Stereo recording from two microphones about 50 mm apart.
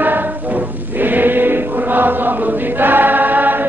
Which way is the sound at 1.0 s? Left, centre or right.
Right.